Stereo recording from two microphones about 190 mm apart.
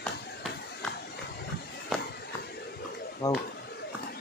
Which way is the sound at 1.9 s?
Centre (ahead or behind).